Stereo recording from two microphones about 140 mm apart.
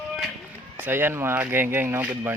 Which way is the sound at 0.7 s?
15° right (ahead or behind).